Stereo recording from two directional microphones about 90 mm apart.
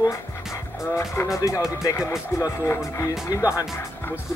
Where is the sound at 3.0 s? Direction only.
35° left (ahead or behind).